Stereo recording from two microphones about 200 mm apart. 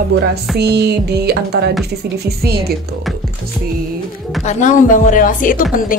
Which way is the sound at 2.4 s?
50° right (ahead or behind).